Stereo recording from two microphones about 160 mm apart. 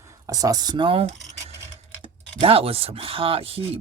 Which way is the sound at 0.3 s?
20° right (ahead or behind).